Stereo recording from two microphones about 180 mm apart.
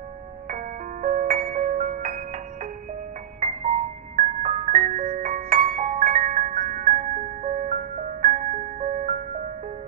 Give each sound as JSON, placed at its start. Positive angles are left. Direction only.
{"t": 0.5, "sound": "music", "side_deg": -45}
{"t": 4.2, "sound": "music", "side_deg": -40}